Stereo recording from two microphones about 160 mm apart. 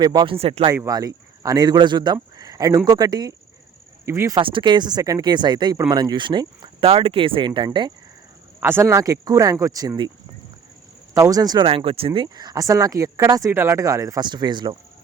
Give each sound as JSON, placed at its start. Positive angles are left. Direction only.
{"t": 0.0, "sound": "speech", "side_deg": -30}
{"t": 0.9, "sound": "speech", "side_deg": -20}
{"t": 4.4, "sound": "speech", "side_deg": -30}
{"t": 8.6, "sound": "speech", "side_deg": -15}
{"t": 11.1, "sound": "speech", "side_deg": -20}